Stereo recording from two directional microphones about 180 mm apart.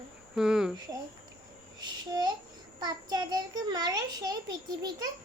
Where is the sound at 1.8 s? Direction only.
25° right (ahead or behind).